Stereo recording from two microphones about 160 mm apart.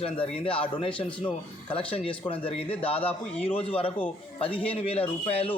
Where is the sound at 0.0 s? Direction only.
35° left (ahead or behind).